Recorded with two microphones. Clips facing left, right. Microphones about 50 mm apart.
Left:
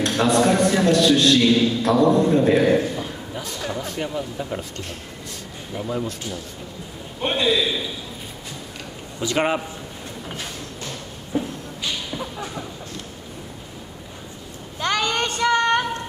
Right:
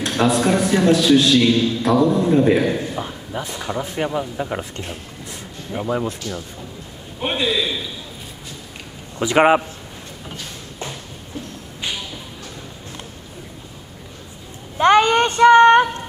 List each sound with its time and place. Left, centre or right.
0.0 s a man's voice: centre
3.0 s speech: right
7.2 s a man's voice: centre
9.2 s a man's voice: right
11.3 s a sound: left
14.8 s a sound: right